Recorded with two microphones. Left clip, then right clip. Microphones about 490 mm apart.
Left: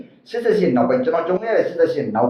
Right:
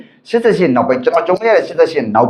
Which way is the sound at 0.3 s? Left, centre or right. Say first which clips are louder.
Right 6 dB; right.